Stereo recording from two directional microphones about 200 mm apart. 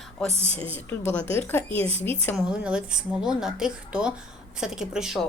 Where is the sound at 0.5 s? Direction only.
10° left (ahead or behind).